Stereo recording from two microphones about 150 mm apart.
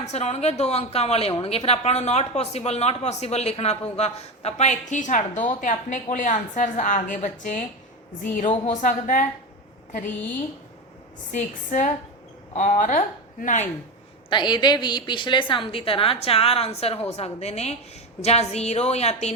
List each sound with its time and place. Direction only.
0.0 s a woman's voice: 50° left (ahead or behind)
8.6 s a woman's voice: 60° left (ahead or behind)
11.3 s a woman's voice: 60° left (ahead or behind)
14.3 s a woman's voice: 30° left (ahead or behind); by 19.3 s 45° left (ahead or behind)